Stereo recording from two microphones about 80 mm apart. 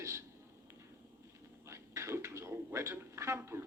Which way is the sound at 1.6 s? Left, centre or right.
Right.